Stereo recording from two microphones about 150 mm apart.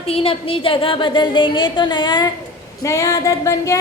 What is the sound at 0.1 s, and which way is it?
A woman's voice, 40° left (ahead or behind).